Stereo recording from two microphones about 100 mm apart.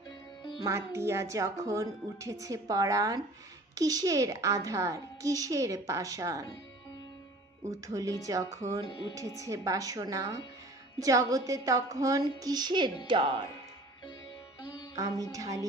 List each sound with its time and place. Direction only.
0.7 s speech: 25° right (ahead or behind)
7.6 s speech: 35° right (ahead or behind); by 13.3 s 55° right (ahead or behind)
15.0 s speech: 35° right (ahead or behind)